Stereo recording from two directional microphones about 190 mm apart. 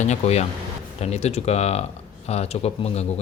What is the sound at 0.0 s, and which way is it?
Speech, 35° left (ahead or behind).